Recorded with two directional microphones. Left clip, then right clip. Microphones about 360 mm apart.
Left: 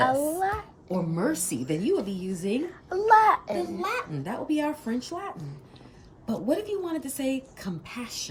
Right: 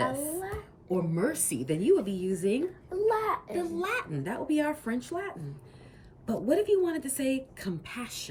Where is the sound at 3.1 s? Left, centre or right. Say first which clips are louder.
Left 11 dB; left.